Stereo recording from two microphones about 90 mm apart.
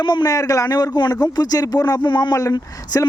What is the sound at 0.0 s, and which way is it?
Speech, 55° left (ahead or behind).